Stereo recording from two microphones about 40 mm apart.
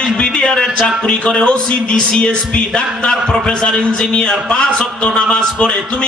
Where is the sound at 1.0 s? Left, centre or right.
Left.